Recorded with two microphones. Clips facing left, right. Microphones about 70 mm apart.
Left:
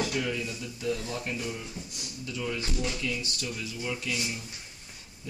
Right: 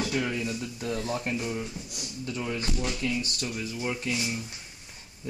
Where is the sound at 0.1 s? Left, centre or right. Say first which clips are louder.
Right 2 dB; right.